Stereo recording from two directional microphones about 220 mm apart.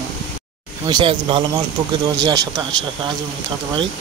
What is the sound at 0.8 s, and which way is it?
Speech, 20° right (ahead or behind).